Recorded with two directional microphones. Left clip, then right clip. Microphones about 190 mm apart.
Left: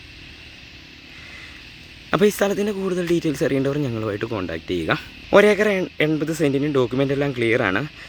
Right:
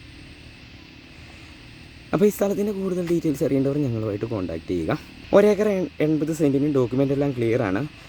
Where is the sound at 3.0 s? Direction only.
Centre (ahead or behind).